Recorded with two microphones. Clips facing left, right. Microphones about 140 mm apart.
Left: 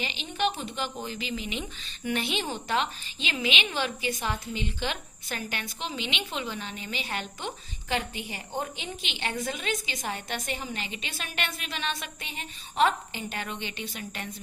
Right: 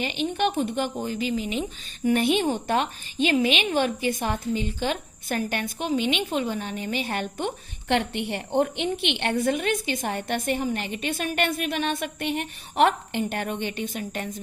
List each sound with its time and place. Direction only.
0.0 s a woman's voice: 55° right (ahead or behind)